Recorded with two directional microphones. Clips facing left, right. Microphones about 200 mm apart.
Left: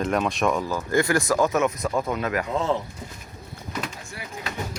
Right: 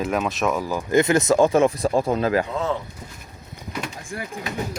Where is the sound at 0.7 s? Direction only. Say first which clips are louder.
Right 4 dB; 15° right (ahead or behind).